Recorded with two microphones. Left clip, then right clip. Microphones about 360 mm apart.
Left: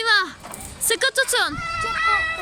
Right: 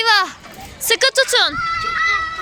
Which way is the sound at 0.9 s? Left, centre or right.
Centre.